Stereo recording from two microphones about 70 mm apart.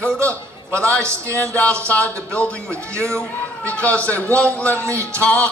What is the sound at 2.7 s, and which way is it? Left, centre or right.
Speech, right.